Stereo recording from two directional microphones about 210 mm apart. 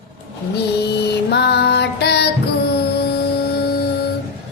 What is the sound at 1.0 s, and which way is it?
Music, 50° left (ahead or behind).